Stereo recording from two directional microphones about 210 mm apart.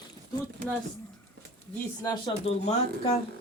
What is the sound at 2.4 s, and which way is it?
Speech, 30° left (ahead or behind).